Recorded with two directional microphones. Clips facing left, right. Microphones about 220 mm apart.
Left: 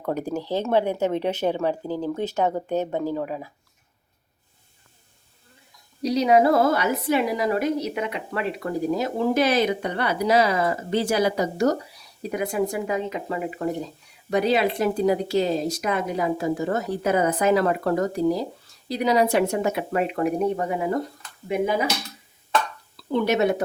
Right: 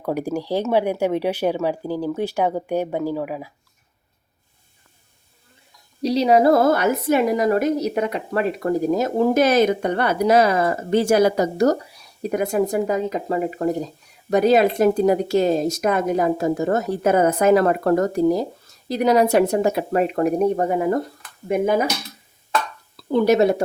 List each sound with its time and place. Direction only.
0.0 s speech: 10° right (ahead or behind)
6.0 s speech: 30° right (ahead or behind); by 21.8 s 50° right (ahead or behind)
23.1 s speech: 40° right (ahead or behind)